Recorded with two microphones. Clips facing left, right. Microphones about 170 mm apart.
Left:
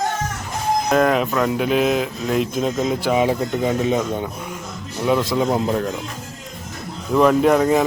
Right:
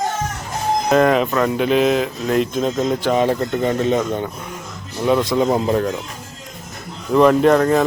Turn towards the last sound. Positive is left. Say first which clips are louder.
# right 1 dB
turn(degrees=10)  # may be behind; listen again after turning